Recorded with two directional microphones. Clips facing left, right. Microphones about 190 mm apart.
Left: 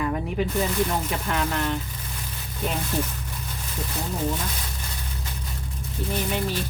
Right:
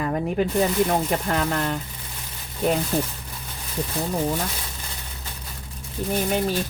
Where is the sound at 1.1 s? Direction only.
40° right (ahead or behind).